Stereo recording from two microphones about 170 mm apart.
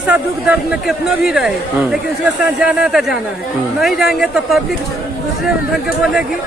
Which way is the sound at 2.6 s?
5° right (ahead or behind).